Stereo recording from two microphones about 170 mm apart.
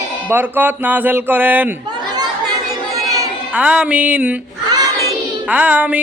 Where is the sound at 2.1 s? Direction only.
20° right (ahead or behind).